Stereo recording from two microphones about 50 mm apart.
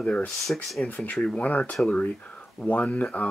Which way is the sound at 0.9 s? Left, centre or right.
Left.